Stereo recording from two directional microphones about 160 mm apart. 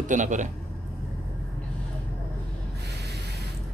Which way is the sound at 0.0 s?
50° right (ahead or behind).